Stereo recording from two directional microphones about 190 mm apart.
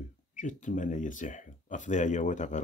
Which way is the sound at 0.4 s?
40° left (ahead or behind).